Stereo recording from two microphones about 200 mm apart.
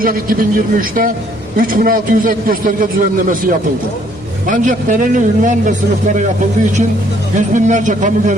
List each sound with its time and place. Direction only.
0.0 s a man's voice: 45° right (ahead or behind)
7.3 s a man's voice: 40° right (ahead or behind)